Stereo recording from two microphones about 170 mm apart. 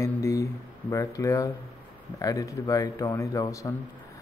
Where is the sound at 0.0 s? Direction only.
20° left (ahead or behind).